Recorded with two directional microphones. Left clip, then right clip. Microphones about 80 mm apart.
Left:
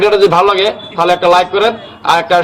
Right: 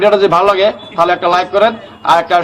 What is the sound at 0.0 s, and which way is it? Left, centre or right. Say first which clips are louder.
A man's voice: left 1 dB; right.